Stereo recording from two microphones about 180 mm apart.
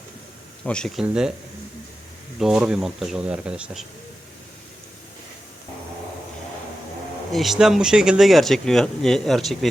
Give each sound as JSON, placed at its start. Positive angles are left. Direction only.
{"t": 0.6, "sound": "speech", "side_deg": 5}
{"t": 2.4, "sound": "speech", "side_deg": -5}
{"t": 7.3, "sound": "speech", "side_deg": 0}